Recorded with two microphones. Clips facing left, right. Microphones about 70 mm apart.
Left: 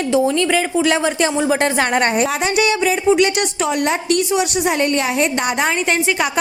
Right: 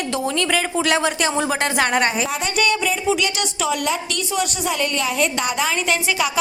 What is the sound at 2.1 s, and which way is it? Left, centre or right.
Speech, left.